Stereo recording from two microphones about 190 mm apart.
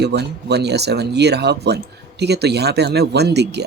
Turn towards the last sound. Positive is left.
turn(degrees=-60)  # may be behind; listen again after turning